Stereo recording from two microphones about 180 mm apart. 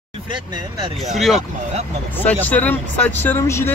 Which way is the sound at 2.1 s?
10° left (ahead or behind).